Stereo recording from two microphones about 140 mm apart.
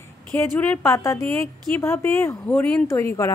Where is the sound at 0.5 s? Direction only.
10° left (ahead or behind).